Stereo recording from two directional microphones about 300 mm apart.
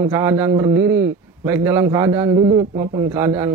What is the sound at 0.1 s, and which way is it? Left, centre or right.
A man's voice, centre.